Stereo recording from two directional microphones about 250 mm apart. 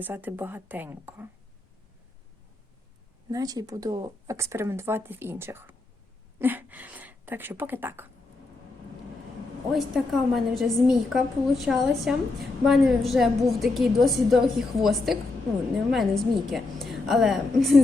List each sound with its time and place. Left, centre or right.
0.0 s speech: centre
3.2 s speech: centre
9.7 s a woman's voice: centre